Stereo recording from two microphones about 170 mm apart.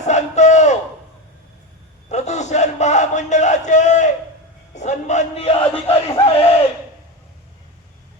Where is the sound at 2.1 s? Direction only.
45° left (ahead or behind).